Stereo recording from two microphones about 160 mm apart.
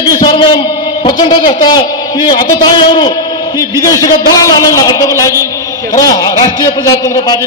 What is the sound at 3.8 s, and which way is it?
A man's voice, 20° left (ahead or behind).